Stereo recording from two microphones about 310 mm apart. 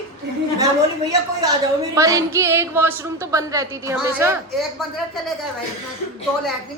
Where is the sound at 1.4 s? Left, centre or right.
Centre.